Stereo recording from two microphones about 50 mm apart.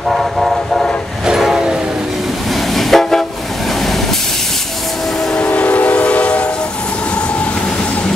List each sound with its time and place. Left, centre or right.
0.1 s train: centre
1.2 s train: centre
2.7 s train: centre
5.3 s train: left